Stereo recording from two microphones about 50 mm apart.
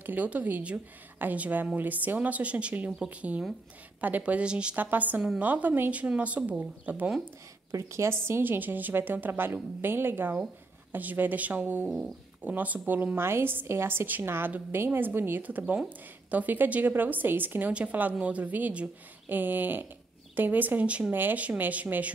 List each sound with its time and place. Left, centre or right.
0.0 s a woman's voice: right
4.7 s a woman's voice: right
6.9 s a woman's voice: right
7.7 s a woman's voice: right
8.2 s a woman's voice: right
15.4 s a woman's voice: right
21.1 s a woman's voice: right
21.4 s a woman's voice: right